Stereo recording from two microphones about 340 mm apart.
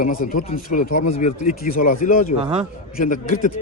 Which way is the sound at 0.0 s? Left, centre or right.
Left.